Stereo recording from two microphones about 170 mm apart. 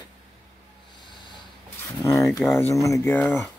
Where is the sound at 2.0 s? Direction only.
20° left (ahead or behind).